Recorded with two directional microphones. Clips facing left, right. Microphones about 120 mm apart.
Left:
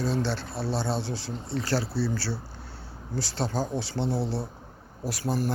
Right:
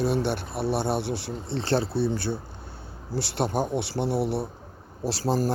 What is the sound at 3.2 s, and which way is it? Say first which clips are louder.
Speech: right 3 dB; 65° right (ahead or behind).